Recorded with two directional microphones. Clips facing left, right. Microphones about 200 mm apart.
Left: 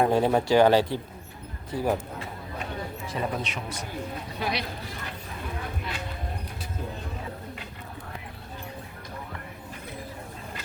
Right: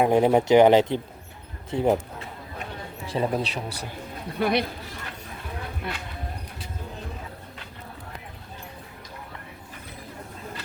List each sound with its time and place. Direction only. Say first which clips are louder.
0.0 s speech: right 3 dB; 20° right (ahead or behind)
3.1 s a man's voice: right 6 dB; 30° right (ahead or behind)
4.3 s speech: right 9 dB; 55° right (ahead or behind)
5.9 s speech: right 6 dB; 55° right (ahead or behind)